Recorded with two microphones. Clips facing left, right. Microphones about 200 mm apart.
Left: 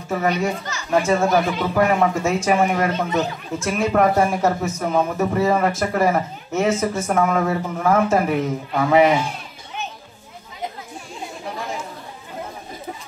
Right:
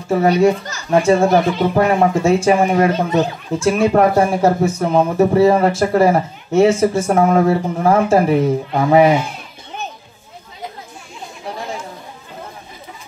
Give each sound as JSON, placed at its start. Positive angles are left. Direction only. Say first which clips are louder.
{"t": 0.1, "sound": "speech", "louder": "right 8 dB", "side_deg": -35}
{"t": 1.0, "sound": "speech", "louder": "right 6 dB", "side_deg": -30}